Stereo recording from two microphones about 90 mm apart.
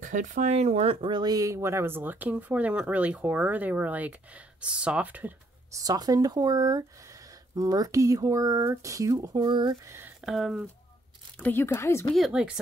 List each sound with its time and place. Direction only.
0.8 s speech: 70° right (ahead or behind)
1.2 s speech: 40° right (ahead or behind); by 5.3 s 15° right (ahead or behind)
5.7 s speech: 40° right (ahead or behind)
9.8 s speech: 25° right (ahead or behind)
10.2 s speech: 5° right (ahead or behind)
11.3 s speech: 15° left (ahead or behind)
11.6 s speech: 30° left (ahead or behind)
12.2 s speech: 5° right (ahead or behind)